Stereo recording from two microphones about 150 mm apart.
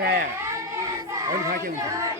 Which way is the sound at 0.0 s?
90° right.